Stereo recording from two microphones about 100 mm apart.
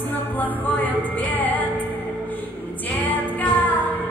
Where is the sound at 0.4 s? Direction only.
15° left (ahead or behind).